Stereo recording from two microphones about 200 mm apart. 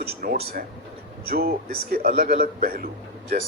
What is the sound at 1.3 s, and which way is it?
Speech, 50° right (ahead or behind).